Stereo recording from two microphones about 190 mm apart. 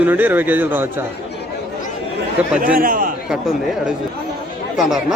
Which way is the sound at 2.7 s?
50° right (ahead or behind).